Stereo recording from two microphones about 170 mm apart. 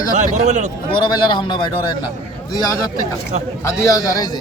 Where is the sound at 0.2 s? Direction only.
45° right (ahead or behind).